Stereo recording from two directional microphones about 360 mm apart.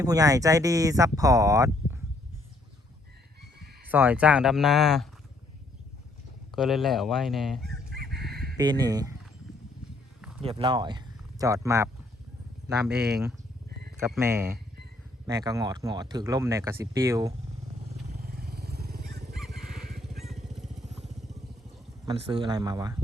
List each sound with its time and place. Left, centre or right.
0.0 s speech: centre
3.9 s speech: centre
6.5 s speech: centre
7.6 s chicken: right
8.5 s speech: centre
10.2 s a sound: centre
10.4 s speech: centre
18.1 s vehicle: right
19.4 s vehicle: centre
20.8 s motorcycle: centre
22.0 s speech: centre